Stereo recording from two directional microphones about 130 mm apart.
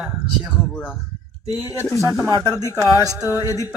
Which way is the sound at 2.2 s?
30° right (ahead or behind).